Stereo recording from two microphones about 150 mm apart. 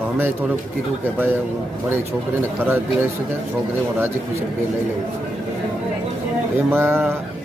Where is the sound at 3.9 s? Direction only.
15° right (ahead or behind).